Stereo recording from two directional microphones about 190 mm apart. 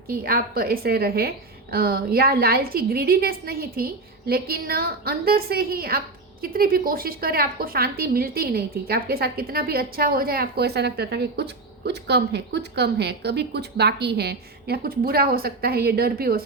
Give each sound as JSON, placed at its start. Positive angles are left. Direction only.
{"t": 0.1, "sound": "a woman's voice", "side_deg": -50}